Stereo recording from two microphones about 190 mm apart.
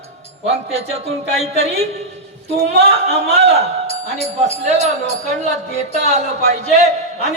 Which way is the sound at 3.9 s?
35° right (ahead or behind).